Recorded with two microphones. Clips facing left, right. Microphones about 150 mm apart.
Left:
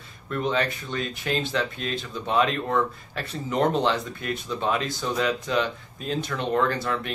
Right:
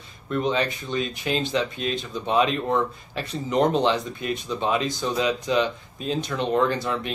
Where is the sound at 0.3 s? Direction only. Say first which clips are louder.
Right 2 dB; 10° right (ahead or behind).